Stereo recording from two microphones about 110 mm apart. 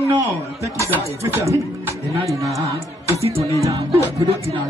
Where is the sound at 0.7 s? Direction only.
25° right (ahead or behind).